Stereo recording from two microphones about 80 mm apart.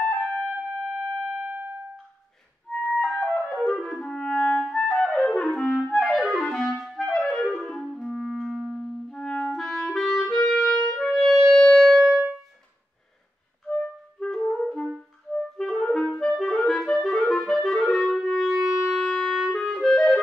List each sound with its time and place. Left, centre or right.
0.4 s music: right
2.7 s music: centre
3.6 s clarinet: centre
9.1 s clarinet: centre
11.0 s music: centre
14.5 s brass instrument: centre
15.5 s clarinet: centre
18.2 s wind instrument: centre
18.6 s wind instrument: centre
18.9 s clarinet: centre